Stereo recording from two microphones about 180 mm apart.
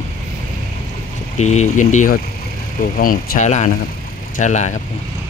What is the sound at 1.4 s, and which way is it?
Speech, 40° left (ahead or behind).